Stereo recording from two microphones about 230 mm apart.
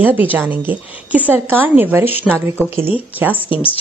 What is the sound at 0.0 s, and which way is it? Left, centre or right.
Speech, centre.